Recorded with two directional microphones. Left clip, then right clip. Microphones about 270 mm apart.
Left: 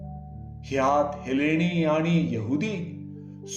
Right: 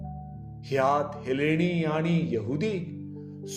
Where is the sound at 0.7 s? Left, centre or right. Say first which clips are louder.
Left 2 dB; right.